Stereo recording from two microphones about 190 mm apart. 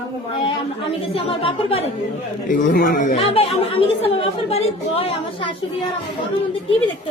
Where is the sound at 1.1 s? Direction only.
30° left (ahead or behind).